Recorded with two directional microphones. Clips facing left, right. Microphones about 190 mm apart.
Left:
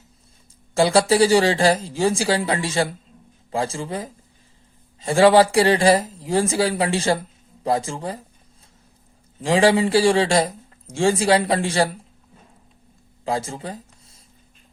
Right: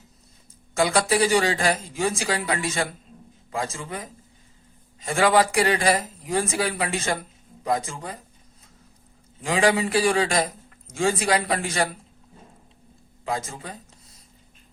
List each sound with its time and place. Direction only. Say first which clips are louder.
0.7 s speech: left 5 dB; 30° left (ahead or behind)
9.4 s speech: left 5 dB; 30° left (ahead or behind)
13.2 s a sound: left 4 dB; 30° left (ahead or behind)